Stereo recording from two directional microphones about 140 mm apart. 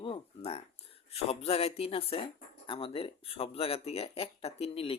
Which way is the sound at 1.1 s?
45° left (ahead or behind).